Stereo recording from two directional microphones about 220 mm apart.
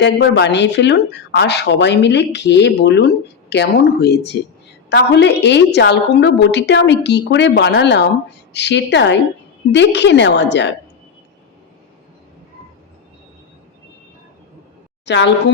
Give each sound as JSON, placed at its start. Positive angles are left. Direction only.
{"t": 0.0, "sound": "a woman's voice", "side_deg": 50}
{"t": 15.0, "sound": "a woman's voice", "side_deg": 50}